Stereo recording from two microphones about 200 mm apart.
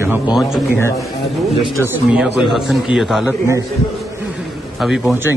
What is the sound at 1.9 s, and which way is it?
A man's voice, 5° right (ahead or behind).